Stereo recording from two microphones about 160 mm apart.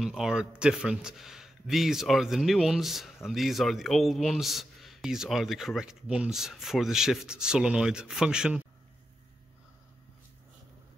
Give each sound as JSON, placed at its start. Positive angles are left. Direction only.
{"t": 0.0, "sound": "speech", "side_deg": 0}